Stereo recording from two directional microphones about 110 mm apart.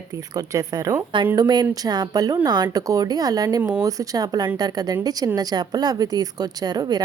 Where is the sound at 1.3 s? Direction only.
40° right (ahead or behind).